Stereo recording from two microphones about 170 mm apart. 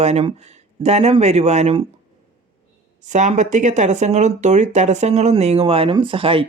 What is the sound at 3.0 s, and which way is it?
Speech, 45° right (ahead or behind).